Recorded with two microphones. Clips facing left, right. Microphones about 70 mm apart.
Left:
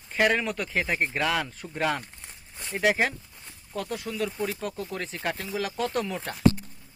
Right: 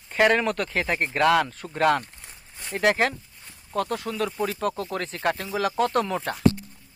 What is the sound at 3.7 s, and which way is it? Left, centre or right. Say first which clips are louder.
Speech: right 5 dB; right.